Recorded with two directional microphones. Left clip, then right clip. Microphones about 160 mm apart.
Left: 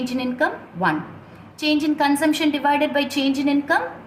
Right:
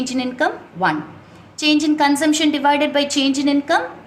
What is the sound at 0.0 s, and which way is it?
A woman's voice, 35° right (ahead or behind).